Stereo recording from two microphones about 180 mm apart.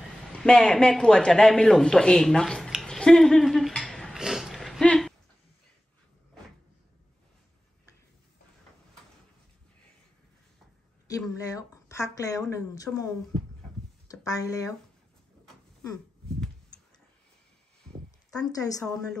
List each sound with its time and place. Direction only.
0.3 s speech: 5° left (ahead or behind)
11.1 s speech: 20° left (ahead or behind)
14.2 s speech: 20° left (ahead or behind)